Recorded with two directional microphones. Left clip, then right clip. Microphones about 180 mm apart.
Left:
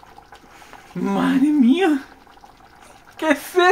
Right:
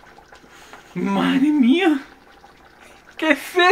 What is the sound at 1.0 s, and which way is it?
Speech, 20° left (ahead or behind).